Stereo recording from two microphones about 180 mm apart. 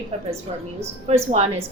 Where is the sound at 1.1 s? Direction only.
35° right (ahead or behind).